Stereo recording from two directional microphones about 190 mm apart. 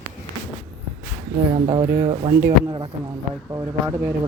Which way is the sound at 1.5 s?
25° right (ahead or behind).